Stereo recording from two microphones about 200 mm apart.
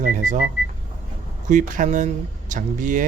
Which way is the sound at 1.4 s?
40° right (ahead or behind).